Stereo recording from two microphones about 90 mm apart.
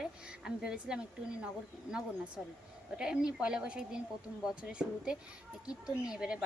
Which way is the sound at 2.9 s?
10° right (ahead or behind).